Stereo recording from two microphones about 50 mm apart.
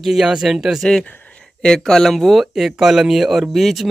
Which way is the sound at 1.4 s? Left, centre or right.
Centre.